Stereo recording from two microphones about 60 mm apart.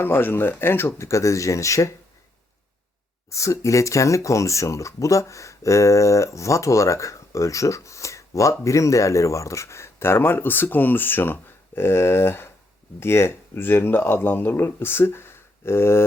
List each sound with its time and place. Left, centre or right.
0.0 s speech: left
0.9 s speech: left
3.2 s speech: left